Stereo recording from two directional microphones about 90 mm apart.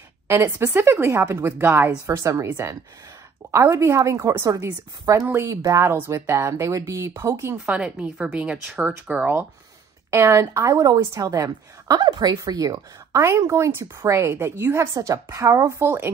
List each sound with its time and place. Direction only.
0.3 s a woman's voice: 30° right (ahead or behind)
7.7 s speech: 10° right (ahead or behind)
10.1 s a woman's voice: 35° right (ahead or behind)
12.0 s a woman's voice: 50° right (ahead or behind); by 16.1 s 25° right (ahead or behind)